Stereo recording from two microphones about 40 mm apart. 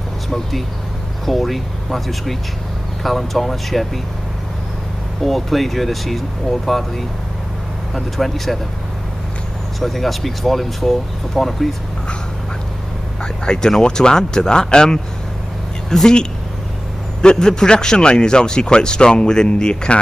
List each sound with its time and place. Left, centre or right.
1.2 s speech: centre
5.2 s speech: centre
9.8 s speech: centre
13.2 s speech: centre
17.2 s a man's voice: centre